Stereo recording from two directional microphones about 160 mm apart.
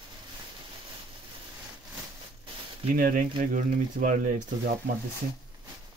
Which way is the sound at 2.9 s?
60° right (ahead or behind).